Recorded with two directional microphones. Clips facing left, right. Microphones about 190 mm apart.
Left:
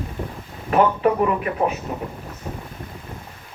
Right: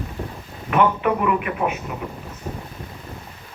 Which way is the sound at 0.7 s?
35° left (ahead or behind).